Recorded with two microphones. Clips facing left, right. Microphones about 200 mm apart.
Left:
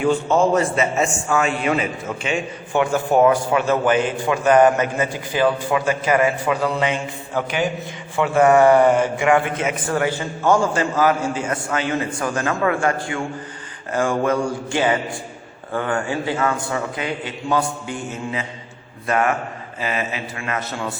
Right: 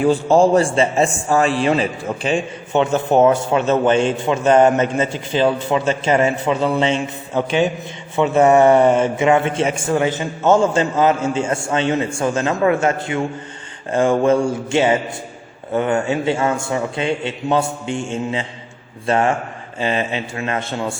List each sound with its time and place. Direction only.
0.0 s a man's voice: 35° right (ahead or behind)